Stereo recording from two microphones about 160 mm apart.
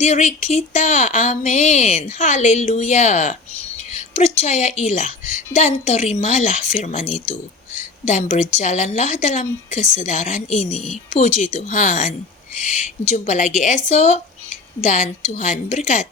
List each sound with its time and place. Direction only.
0.0 s a woman's voice: 45° left (ahead or behind)